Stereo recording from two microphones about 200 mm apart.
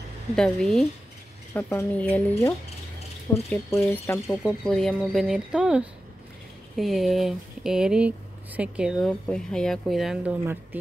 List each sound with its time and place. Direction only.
0.4 s a woman's voice: centre (ahead or behind)
3.4 s speech: 10° left (ahead or behind)
4.4 s a woman's voice: 5° left (ahead or behind)